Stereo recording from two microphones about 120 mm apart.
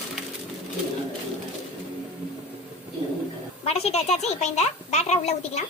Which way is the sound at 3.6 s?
60° left (ahead or behind).